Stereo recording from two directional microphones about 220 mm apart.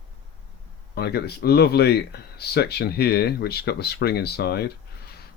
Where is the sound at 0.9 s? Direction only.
45° left (ahead or behind).